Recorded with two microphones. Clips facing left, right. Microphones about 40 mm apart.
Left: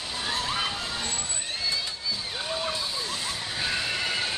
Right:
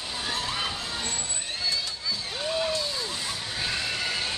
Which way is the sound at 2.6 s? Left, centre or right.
Centre.